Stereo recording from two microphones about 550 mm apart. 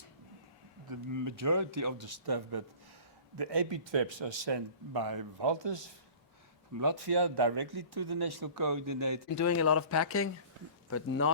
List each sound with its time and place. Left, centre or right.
0.9 s speech: right
9.3 s speech: left